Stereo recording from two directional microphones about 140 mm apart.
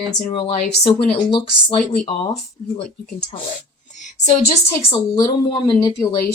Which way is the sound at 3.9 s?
60° left (ahead or behind).